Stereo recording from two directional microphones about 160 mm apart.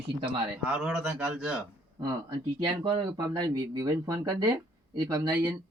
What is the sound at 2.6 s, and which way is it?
Speech, 30° right (ahead or behind).